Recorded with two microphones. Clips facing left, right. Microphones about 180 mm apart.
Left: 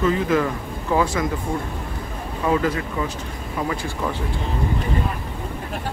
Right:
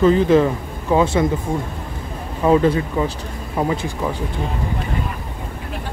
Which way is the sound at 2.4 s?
30° right (ahead or behind).